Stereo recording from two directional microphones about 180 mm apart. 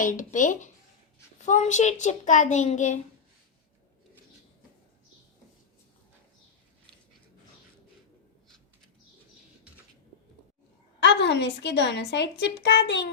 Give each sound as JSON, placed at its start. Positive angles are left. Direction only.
{"t": 0.0, "sound": "a child's voice", "side_deg": 45}
{"t": 11.0, "sound": "a woman's voice", "side_deg": 70}